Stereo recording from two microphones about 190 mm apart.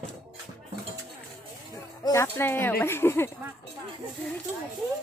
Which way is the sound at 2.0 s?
15° left (ahead or behind).